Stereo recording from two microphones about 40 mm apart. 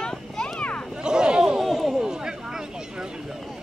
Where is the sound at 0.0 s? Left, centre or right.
Left.